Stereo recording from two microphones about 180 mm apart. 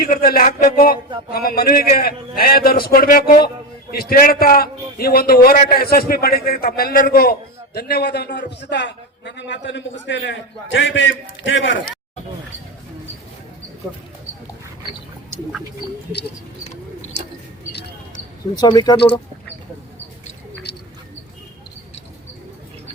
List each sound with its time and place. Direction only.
0.0 s a man's voice: 55° left (ahead or behind); by 11.8 s 90° left
18.5 s speech: 25° left (ahead or behind)
20.7 s a sound: 70° left (ahead or behind)